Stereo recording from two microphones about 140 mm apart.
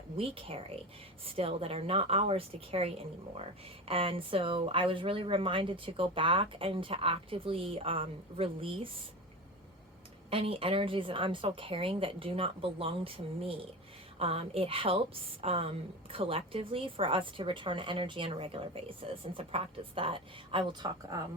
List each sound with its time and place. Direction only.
0.2 s a woman's voice: 40° right (ahead or behind)
10.2 s a woman's voice: 45° right (ahead or behind)